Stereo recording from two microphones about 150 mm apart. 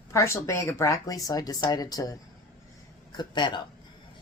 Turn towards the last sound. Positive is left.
turn(degrees=30)  # may be behind; listen again after turning